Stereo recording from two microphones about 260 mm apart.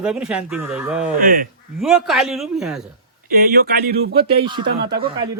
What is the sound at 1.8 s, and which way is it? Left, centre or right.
Speech, centre.